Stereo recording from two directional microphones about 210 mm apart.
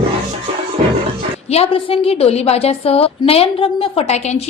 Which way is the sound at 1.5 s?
25° left (ahead or behind).